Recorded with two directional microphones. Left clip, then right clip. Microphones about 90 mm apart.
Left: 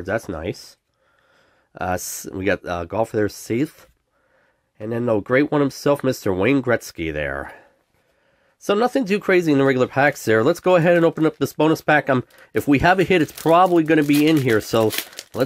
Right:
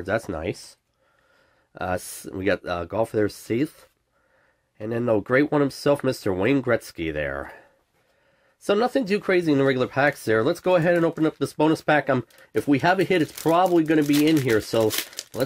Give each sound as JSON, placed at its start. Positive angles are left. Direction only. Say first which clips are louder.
{"t": 0.0, "sound": "speech", "louder": "left 1 dB", "side_deg": 15}
{"t": 1.7, "sound": "speech", "louder": "left 3 dB", "side_deg": 30}
{"t": 2.0, "sound": "speech", "louder": "left 4 dB", "side_deg": 0}
{"t": 2.3, "sound": "speech", "louder": "left 2 dB", "side_deg": 30}
{"t": 4.7, "sound": "speech", "louder": "left 2 dB", "side_deg": 20}
{"t": 11.5, "sound": "speech", "louder": "left 3 dB", "side_deg": 35}
{"t": 14.9, "sound": "speech", "louder": "left 2 dB", "side_deg": 0}